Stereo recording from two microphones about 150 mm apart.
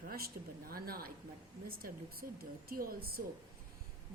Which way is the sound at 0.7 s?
80° right.